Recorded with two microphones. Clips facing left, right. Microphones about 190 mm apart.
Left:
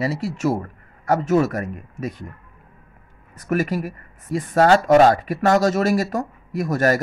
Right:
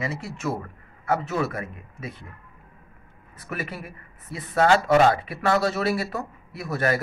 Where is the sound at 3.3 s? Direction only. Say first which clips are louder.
Left 11 dB; 45° left (ahead or behind).